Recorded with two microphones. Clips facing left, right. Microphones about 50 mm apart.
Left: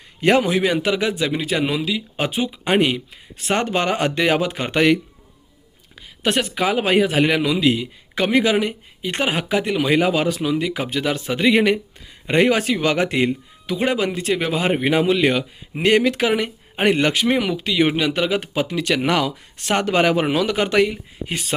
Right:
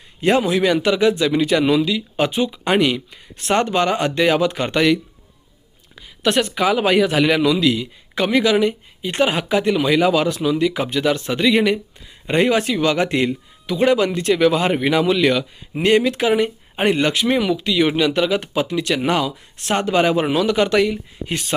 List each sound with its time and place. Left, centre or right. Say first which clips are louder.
0.3 s a man's voice: right 1 dB; left
1.3 s a man's voice: right 5 dB; centre; by 4.4 s left
4.4 s a man's voice: right 2 dB; left
6.2 s speech: right 2 dB; centre
6.6 s a man's voice: right 1 dB; left
11.4 s a man's voice: even; left
15.8 s speech: right 1 dB; left
18.9 s a man's voice: left 1 dB; left